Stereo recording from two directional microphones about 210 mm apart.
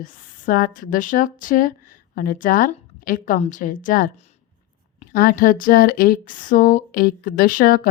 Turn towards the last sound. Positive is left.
turn(degrees=45)  # may be behind; listen again after turning